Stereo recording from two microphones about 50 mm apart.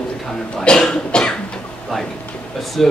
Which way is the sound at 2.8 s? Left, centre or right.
Centre.